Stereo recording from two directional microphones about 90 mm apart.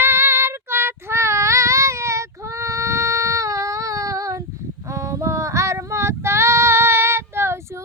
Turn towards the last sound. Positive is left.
turn(degrees=-30)  # may be behind; listen again after turning